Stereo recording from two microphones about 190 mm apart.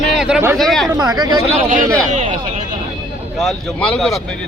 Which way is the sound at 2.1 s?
40° right (ahead or behind).